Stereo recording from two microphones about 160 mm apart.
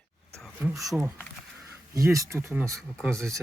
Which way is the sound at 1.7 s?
15° right (ahead or behind).